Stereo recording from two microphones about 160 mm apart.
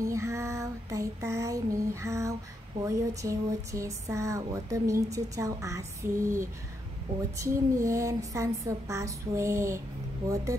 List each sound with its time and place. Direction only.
0.0 s female singing: 20° right (ahead or behind)
2.8 s speech: 20° right (ahead or behind)